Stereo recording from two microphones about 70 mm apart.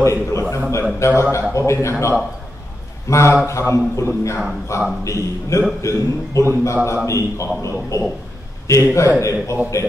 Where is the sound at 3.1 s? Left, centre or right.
Left.